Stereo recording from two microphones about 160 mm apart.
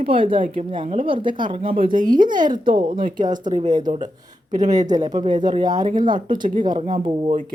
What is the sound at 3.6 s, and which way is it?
Speech, 25° right (ahead or behind).